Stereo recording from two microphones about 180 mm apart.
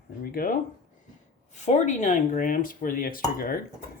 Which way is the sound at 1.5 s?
40° left (ahead or behind).